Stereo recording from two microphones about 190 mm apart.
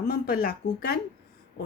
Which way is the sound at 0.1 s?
50° left (ahead or behind).